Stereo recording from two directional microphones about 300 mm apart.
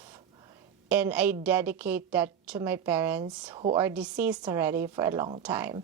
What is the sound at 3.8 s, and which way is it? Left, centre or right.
A woman's voice, centre.